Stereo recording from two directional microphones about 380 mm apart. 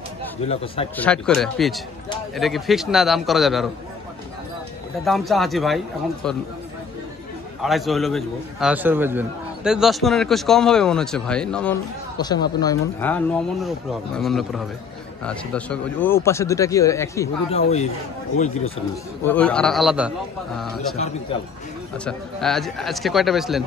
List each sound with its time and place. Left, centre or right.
0.4 s speech: centre
0.9 s a man's voice: centre
5.0 s a man's voice: centre
7.6 s a man's voice: centre
19.2 s a man's voice: centre
21.9 s a man's voice: centre